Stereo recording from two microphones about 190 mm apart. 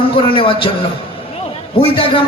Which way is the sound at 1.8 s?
25° left (ahead or behind).